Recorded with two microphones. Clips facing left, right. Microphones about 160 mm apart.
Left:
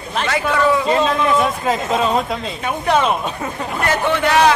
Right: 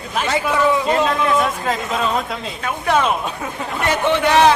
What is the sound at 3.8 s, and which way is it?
Speech, 20° right (ahead or behind).